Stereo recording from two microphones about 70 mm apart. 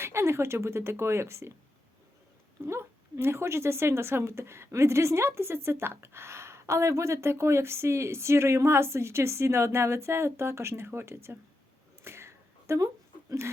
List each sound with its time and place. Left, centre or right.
0.0 s speech: right
2.6 s speech: right
12.0 s a sound: right